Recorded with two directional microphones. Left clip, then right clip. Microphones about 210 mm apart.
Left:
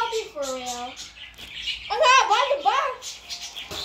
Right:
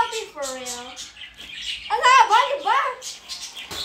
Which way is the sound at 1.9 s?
30° right (ahead or behind).